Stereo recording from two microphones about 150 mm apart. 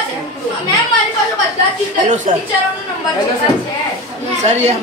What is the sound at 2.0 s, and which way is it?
Speech, 55° right (ahead or behind).